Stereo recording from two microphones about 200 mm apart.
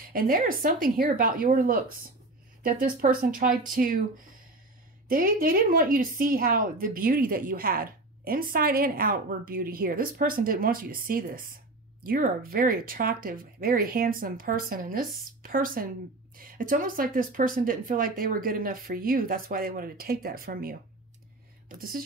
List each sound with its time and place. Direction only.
0.0 s a woman's voice: 45° right (ahead or behind)
5.0 s a woman's voice: 45° right (ahead or behind)